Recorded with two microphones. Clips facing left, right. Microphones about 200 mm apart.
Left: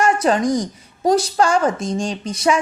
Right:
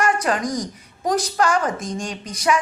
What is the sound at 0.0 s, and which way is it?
A woman's voice, 25° left (ahead or behind).